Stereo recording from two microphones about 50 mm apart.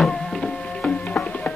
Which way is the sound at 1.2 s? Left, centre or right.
Left.